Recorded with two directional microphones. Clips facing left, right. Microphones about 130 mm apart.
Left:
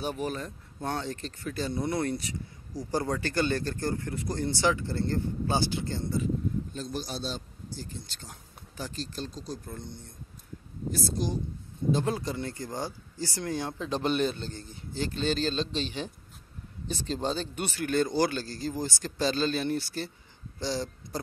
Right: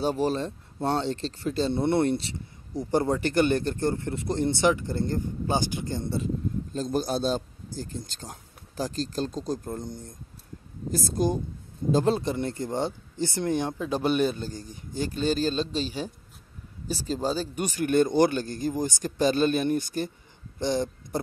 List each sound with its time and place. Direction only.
0.0 s speech: 30° right (ahead or behind); by 6.0 s 15° right (ahead or behind)
6.7 s a man's voice: 45° right (ahead or behind)
11.9 s speech: 35° right (ahead or behind)
12.2 s speech: 20° right (ahead or behind)
16.8 s speech: 10° right (ahead or behind)
17.7 s speech: 20° right (ahead or behind)